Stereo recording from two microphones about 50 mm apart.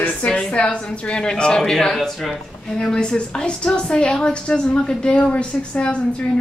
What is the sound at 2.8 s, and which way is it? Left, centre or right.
A woman's voice, centre.